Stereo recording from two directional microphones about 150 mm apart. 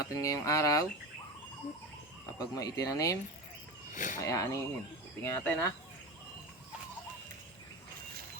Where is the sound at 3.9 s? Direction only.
60° left (ahead or behind).